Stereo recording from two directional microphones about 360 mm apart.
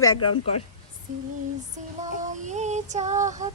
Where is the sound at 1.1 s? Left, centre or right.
Right.